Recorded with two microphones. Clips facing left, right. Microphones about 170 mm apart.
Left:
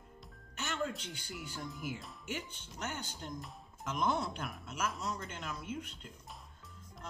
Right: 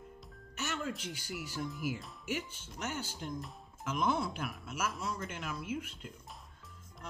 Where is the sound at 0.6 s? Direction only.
5° right (ahead or behind).